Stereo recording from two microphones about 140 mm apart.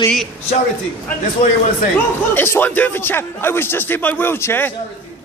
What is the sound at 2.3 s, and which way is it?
A man's voice, 15° left (ahead or behind).